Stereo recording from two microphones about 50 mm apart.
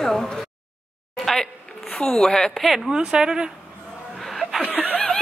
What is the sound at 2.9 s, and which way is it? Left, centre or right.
Speech, centre.